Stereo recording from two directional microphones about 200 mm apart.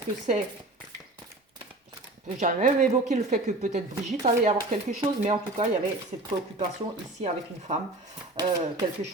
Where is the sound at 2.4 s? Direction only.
40° right (ahead or behind).